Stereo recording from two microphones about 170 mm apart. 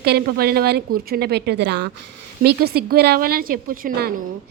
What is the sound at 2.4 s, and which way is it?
A woman's voice, 65° right (ahead or behind).